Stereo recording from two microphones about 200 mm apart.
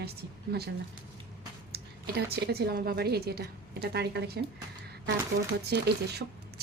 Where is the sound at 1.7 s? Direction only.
55° right (ahead or behind).